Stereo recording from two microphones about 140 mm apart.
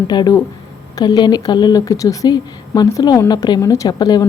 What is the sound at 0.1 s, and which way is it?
A woman's voice, 30° left (ahead or behind).